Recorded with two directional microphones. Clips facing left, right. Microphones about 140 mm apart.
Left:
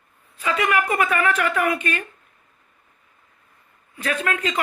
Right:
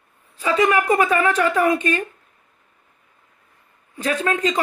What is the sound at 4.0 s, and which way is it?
Speech, 25° right (ahead or behind).